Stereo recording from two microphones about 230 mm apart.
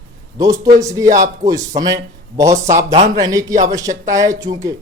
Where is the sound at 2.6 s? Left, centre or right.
Right.